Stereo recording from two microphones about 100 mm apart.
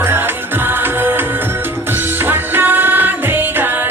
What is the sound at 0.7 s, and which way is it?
Music, 20° right (ahead or behind).